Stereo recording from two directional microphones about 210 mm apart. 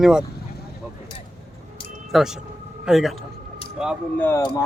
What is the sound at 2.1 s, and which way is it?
Speech, centre (ahead or behind).